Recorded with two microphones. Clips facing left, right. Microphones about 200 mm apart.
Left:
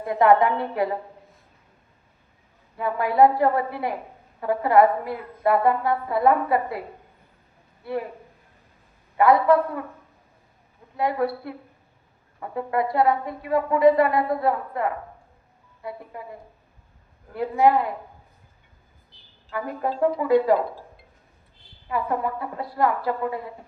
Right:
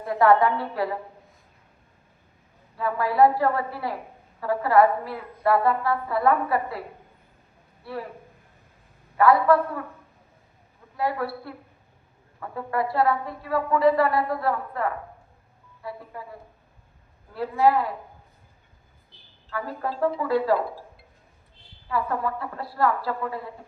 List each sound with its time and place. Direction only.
0.0 s a woman's voice: 20° left (ahead or behind)
2.7 s a woman's voice: 20° left (ahead or behind)
9.1 s a woman's voice: 20° left (ahead or behind)
10.9 s a woman's voice: 20° left (ahead or behind)
17.3 s a woman's voice: 20° left (ahead or behind)
19.5 s a woman's voice: 20° left (ahead or behind)
21.8 s a woman's voice: 20° left (ahead or behind)